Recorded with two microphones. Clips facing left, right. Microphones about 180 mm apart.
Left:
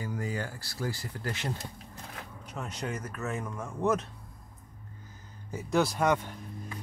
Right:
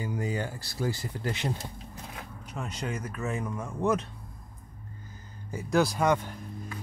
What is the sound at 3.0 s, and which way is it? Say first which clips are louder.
Speech: right 2 dB; 10° right (ahead or behind).